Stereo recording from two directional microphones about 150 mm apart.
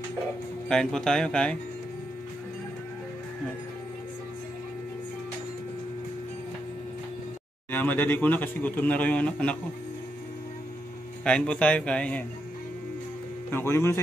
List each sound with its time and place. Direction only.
0.7 s speech: 5° left (ahead or behind)
7.7 s a man's voice: 10° left (ahead or behind)
11.2 s a man's voice: 5° left (ahead or behind)
13.5 s a man's voice: 15° left (ahead or behind)